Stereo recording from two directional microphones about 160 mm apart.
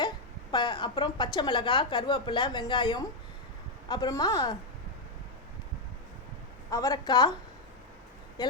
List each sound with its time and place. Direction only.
0.5 s a woman's voice: 30° left (ahead or behind)
6.7 s a woman's voice: 25° left (ahead or behind)